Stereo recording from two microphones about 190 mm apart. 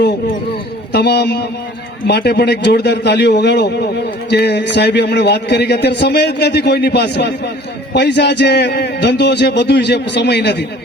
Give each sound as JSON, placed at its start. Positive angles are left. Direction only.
{"t": 0.9, "sound": "a man's voice", "side_deg": 60}